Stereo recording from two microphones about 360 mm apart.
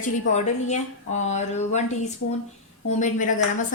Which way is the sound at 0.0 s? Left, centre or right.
Centre.